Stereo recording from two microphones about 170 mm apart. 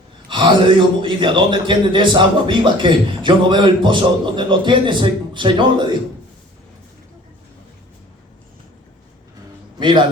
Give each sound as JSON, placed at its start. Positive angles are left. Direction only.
{"t": 0.3, "sound": "a sound", "side_deg": -30}
{"t": 1.0, "sound": "a man's voice", "side_deg": -30}
{"t": 9.7, "sound": "a man's voice", "side_deg": -30}